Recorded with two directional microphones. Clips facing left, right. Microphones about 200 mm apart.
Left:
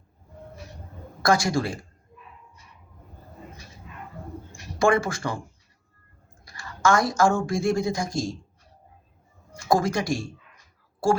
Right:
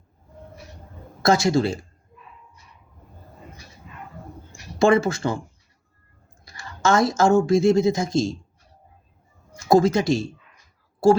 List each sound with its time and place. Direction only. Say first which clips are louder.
1.2 s speech: right 4 dB; 25° right (ahead or behind)
4.8 s speech: right 4 dB; 25° right (ahead or behind)
6.4 s a woman's voice: even; 25° right (ahead or behind)
9.6 s speech: right 6 dB; 25° right (ahead or behind)